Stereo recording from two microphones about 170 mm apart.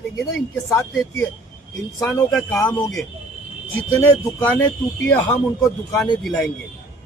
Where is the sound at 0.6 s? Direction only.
15° left (ahead or behind).